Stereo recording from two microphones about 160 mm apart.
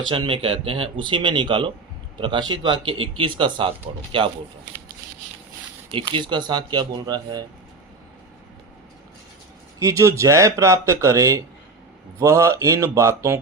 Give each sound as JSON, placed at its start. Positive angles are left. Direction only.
{"t": 0.1, "sound": "speech", "side_deg": -35}
{"t": 5.9, "sound": "speech", "side_deg": -30}
{"t": 9.8, "sound": "speech", "side_deg": -20}